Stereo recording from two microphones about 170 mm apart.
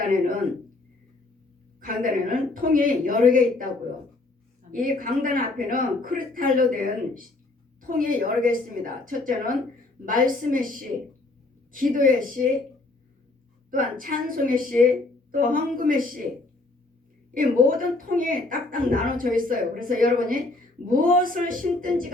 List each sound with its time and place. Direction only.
1.8 s a woman's voice: 55° right (ahead or behind)
4.7 s a woman's voice: 55° right (ahead or behind)
13.7 s a woman's voice: 55° right (ahead or behind)
17.3 s a woman's voice: 55° right (ahead or behind)